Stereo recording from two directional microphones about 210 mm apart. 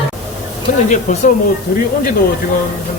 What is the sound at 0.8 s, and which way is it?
Speech, 35° left (ahead or behind).